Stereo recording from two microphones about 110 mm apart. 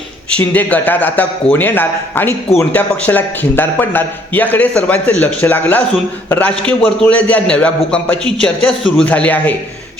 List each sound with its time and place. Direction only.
0.5 s a man's voice: 15° left (ahead or behind)